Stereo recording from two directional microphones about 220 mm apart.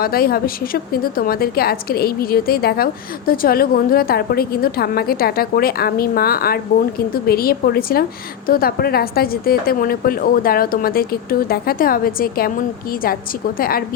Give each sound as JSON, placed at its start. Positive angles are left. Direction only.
{"t": 0.0, "sound": "a woman's voice", "side_deg": 45}